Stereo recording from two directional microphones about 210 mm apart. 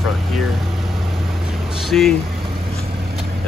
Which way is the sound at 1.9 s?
5° left (ahead or behind).